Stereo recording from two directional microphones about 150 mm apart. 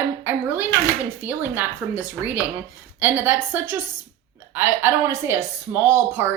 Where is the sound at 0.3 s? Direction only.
10° right (ahead or behind).